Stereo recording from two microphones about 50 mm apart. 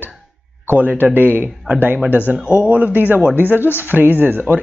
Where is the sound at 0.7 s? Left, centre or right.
Right.